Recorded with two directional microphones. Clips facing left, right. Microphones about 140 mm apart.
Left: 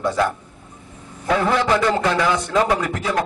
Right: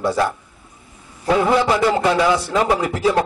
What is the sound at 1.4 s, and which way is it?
A man's voice, 15° right (ahead or behind).